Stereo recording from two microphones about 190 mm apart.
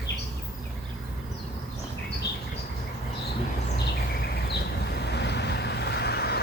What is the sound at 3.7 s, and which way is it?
Vehicle, 60° left (ahead or behind).